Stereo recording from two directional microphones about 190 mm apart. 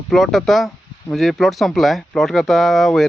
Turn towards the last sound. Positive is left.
turn(degrees=0)  # may be behind; listen again after turning